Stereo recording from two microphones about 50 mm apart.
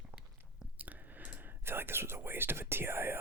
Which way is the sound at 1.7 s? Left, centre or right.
Right.